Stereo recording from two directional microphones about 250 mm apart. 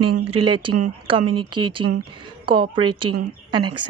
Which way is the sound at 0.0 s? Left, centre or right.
Right.